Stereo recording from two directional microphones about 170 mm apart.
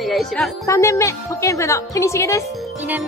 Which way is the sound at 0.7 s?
15° left (ahead or behind).